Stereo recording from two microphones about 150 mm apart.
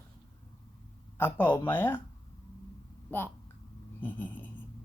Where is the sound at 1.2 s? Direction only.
15° left (ahead or behind).